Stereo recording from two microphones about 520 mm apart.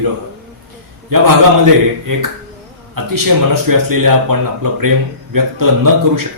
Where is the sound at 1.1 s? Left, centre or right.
Right.